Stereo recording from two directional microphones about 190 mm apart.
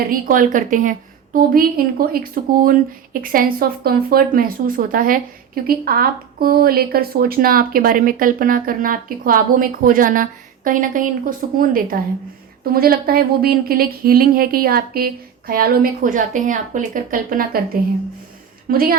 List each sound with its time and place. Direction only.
0.1 s speech: 45° right (ahead or behind)
18.7 s speech: 50° right (ahead or behind)